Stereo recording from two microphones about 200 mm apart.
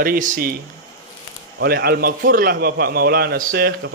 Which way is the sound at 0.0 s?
45° right (ahead or behind).